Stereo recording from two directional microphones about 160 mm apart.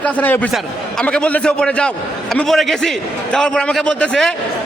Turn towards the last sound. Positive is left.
turn(degrees=5)  # may be behind; listen again after turning